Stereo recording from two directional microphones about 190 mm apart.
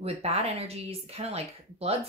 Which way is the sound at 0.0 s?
35° right (ahead or behind).